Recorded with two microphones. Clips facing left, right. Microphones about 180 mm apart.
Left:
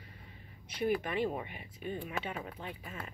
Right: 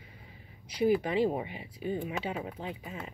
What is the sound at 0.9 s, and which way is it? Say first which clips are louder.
Speech: right 5 dB; 20° right (ahead or behind).